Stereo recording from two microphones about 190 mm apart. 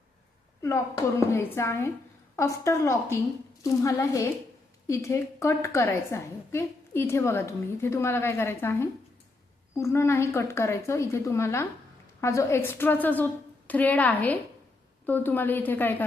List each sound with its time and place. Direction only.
1.3 s a woman's voice: 15° left (ahead or behind)